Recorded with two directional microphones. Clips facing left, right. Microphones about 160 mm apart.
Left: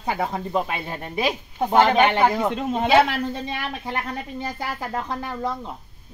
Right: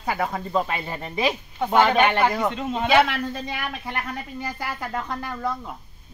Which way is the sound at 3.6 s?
25° left (ahead or behind).